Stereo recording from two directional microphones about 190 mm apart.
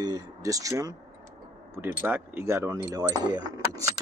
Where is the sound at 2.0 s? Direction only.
10° right (ahead or behind).